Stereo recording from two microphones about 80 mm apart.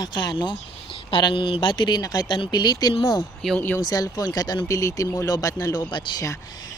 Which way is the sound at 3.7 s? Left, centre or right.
Left.